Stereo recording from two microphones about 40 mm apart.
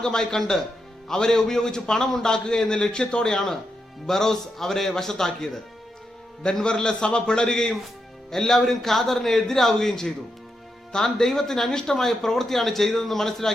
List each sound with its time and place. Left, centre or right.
0.0 s a man's voice: centre
4.0 s a man's voice: centre